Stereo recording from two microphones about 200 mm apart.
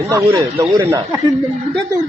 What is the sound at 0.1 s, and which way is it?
Speech, 15° right (ahead or behind).